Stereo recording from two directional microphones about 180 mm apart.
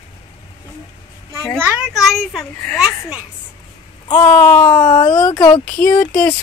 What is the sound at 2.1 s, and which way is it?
Speech, centre (ahead or behind).